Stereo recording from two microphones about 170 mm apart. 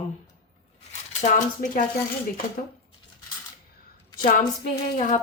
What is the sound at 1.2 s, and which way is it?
Speech, 50° left (ahead or behind).